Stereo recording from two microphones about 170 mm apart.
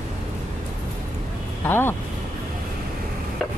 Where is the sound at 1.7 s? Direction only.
15° left (ahead or behind).